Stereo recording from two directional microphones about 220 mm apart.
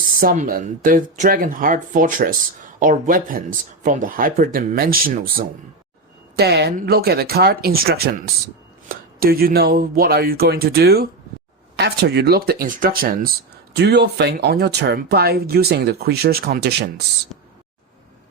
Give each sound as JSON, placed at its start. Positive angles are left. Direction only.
{"t": 0.2, "sound": "speech", "side_deg": -40}